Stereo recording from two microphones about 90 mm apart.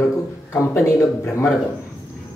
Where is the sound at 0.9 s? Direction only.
35° left (ahead or behind).